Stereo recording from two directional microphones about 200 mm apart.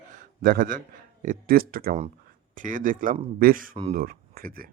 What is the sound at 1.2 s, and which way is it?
A man's voice, 45° right (ahead or behind).